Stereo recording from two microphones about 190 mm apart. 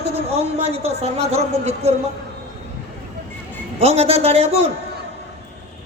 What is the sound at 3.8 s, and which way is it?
Speech, 35° right (ahead or behind).